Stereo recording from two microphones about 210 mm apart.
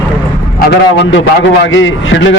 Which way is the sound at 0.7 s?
60° left (ahead or behind).